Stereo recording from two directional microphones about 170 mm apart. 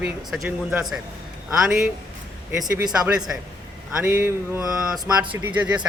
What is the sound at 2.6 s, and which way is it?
Speech, 25° right (ahead or behind).